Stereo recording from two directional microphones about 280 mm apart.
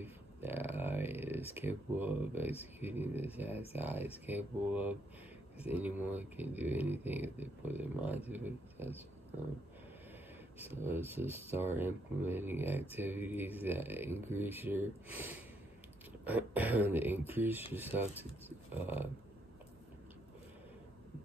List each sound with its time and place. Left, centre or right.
0.0 s speech: centre
10.6 s speech: centre
18.8 s speech: centre